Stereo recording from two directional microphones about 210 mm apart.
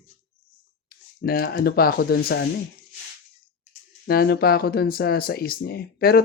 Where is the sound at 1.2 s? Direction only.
45° left (ahead or behind).